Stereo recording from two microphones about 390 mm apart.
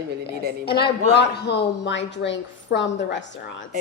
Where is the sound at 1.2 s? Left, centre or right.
Left.